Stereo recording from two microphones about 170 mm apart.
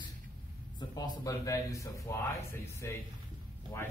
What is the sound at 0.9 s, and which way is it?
A man's voice, 20° left (ahead or behind).